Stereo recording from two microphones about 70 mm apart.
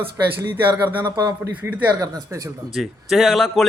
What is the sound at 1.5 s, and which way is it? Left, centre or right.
Speech, right.